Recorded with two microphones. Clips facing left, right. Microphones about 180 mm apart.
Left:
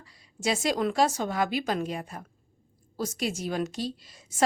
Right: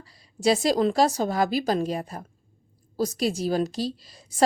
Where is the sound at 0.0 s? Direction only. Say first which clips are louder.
Right 7 dB; 35° right (ahead or behind).